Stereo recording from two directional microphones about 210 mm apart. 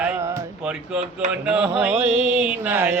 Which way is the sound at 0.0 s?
15° right (ahead or behind).